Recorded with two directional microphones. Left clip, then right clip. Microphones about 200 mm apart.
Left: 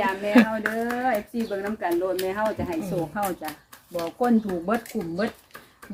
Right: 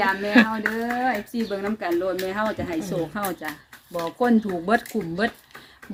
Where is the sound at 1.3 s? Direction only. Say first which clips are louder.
Right 1 dB; 55° right (ahead or behind).